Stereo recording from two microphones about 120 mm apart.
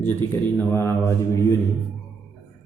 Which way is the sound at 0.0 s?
20° left (ahead or behind).